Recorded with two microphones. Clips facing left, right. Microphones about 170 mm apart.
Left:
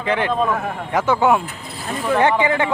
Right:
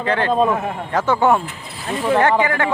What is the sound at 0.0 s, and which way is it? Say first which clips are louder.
Speech: right 1 dB; 15° left (ahead or behind).